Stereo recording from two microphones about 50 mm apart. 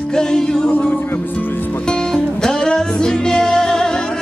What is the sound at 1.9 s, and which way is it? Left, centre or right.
Music, centre.